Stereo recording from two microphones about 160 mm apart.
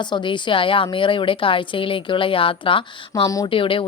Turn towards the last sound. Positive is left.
turn(degrees=35)  # may be behind; listen again after turning